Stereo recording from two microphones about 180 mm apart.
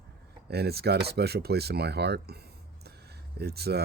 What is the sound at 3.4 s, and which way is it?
Speech, 60° right (ahead or behind).